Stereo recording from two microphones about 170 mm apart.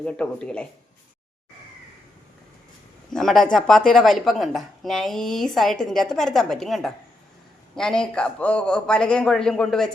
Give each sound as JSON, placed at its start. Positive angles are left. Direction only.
{"t": 0.0, "sound": "speech", "side_deg": 5}
{"t": 3.1, "sound": "speech", "side_deg": 0}